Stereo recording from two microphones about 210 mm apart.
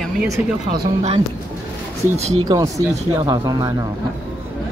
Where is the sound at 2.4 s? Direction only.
15° right (ahead or behind).